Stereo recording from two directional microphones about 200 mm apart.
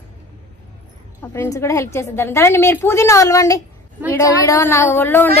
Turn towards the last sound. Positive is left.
turn(degrees=10)  # may be behind; listen again after turning